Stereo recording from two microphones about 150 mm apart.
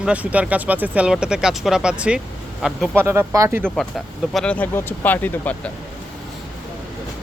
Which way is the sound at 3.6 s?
5° left (ahead or behind).